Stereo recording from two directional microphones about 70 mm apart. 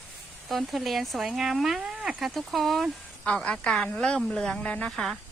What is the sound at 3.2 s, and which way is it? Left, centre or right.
A woman's voice, centre.